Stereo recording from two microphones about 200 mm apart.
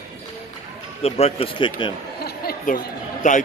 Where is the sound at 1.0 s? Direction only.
30° left (ahead or behind).